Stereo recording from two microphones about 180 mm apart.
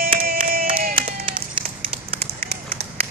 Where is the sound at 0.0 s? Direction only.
55° right (ahead or behind).